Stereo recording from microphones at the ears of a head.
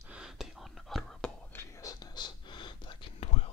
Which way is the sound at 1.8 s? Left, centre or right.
Left.